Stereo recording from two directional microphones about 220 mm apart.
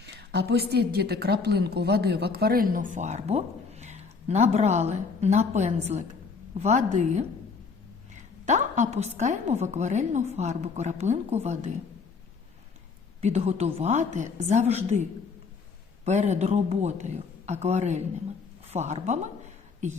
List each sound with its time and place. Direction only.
0.0 s a woman's voice: 50° right (ahead or behind); by 11.3 s 30° right (ahead or behind)
13.2 s a woman's voice: 30° right (ahead or behind)
16.0 s a woman's voice: 30° right (ahead or behind)